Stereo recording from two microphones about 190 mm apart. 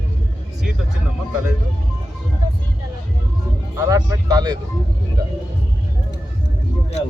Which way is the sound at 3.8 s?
15° right (ahead or behind).